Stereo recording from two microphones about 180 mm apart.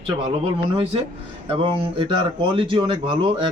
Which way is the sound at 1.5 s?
30° right (ahead or behind).